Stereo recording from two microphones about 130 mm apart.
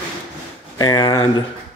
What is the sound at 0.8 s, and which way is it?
Speech, 35° left (ahead or behind).